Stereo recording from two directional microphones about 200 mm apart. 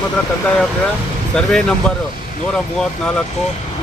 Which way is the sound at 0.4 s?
5° left (ahead or behind).